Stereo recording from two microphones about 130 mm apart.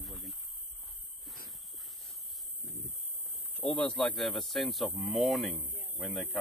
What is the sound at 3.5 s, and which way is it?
Speech, 10° left (ahead or behind).